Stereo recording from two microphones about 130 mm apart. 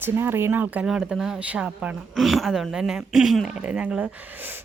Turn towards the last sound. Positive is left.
turn(degrees=-10)  # may be behind; listen again after turning